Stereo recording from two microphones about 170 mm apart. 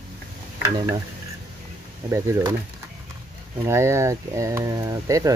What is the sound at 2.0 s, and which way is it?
Speech, 20° right (ahead or behind).